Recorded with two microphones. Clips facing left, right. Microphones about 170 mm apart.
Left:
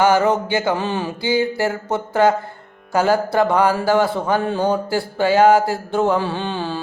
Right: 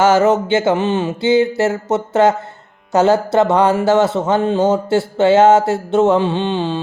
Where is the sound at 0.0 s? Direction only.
25° right (ahead or behind).